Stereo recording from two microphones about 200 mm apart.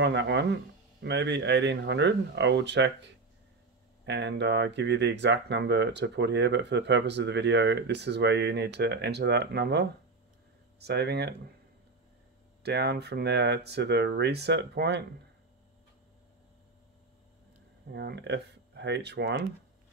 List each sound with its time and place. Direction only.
0.0 s speech: 60° right (ahead or behind)
12.6 s speech: 55° right (ahead or behind)
17.9 s speech: 60° right (ahead or behind)